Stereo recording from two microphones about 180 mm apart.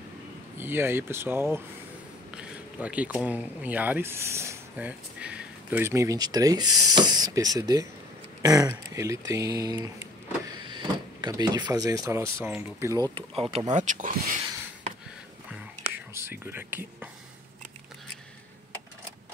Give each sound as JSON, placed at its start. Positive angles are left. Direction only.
{"t": 0.6, "sound": "speech", "side_deg": -10}
{"t": 13.1, "sound": "speech", "side_deg": -30}
{"t": 15.9, "sound": "whispering", "side_deg": -15}